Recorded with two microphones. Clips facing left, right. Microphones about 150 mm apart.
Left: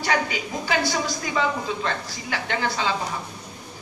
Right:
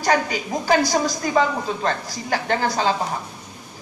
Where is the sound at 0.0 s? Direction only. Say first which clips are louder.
Right 4 dB; 40° right (ahead or behind).